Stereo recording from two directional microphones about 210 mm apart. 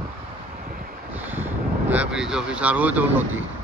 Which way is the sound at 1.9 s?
5° right (ahead or behind).